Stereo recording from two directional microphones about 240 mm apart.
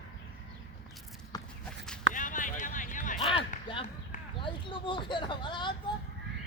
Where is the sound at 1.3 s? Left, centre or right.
Centre.